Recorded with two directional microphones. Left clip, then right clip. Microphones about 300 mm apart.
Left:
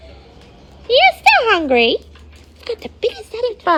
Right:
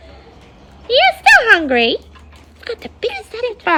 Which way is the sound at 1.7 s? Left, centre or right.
Centre.